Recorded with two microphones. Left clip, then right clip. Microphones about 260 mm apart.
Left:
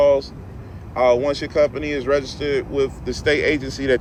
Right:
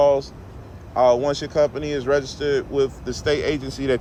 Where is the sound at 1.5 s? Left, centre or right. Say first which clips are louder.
Left 2 dB; right.